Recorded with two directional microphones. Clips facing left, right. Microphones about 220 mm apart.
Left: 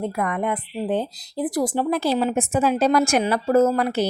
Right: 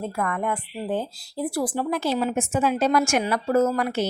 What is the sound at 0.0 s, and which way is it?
Speech, 20° left (ahead or behind).